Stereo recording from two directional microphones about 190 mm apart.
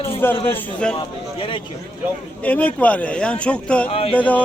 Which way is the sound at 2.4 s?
5° left (ahead or behind).